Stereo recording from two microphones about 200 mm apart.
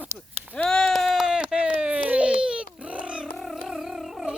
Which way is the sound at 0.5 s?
5° left (ahead or behind).